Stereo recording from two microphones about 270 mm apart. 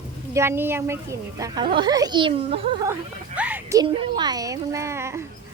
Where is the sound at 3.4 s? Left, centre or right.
Centre.